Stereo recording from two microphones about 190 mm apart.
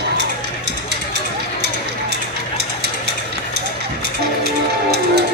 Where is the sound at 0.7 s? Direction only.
60° right (ahead or behind).